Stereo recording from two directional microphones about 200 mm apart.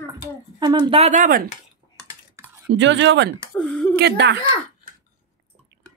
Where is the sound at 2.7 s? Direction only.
65° right (ahead or behind).